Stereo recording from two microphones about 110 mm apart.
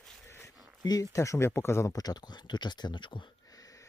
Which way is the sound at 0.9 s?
30° left (ahead or behind).